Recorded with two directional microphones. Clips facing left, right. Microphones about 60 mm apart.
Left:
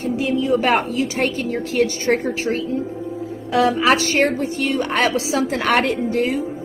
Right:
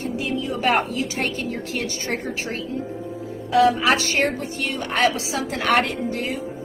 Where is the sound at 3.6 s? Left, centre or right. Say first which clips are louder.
Left 2 dB; left.